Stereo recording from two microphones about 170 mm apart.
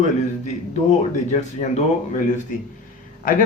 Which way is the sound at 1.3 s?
45° left (ahead or behind).